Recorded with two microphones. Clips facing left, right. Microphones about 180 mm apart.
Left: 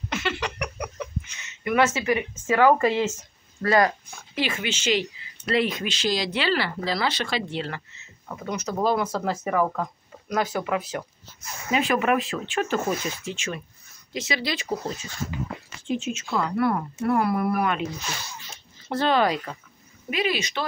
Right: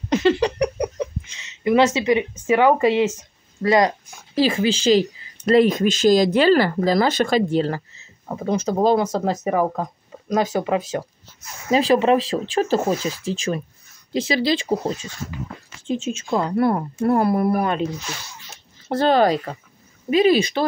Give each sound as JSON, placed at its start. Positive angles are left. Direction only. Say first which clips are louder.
{"t": 0.1, "sound": "speech", "louder": "right 12 dB", "side_deg": -35}
{"t": 4.4, "sound": "speech", "louder": "right 9 dB", "side_deg": -35}
{"t": 18.9, "sound": "speech", "louder": "right 5 dB", "side_deg": -40}